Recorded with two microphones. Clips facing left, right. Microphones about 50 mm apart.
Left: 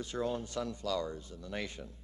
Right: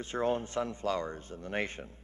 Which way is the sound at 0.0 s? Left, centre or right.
Right.